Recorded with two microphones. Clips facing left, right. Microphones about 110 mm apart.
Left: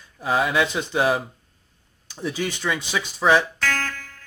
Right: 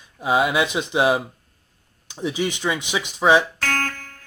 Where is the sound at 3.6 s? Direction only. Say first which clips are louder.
Right 1 dB; 50° right (ahead or behind).